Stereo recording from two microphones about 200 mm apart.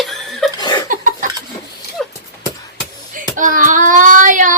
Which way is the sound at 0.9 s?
40° right (ahead or behind).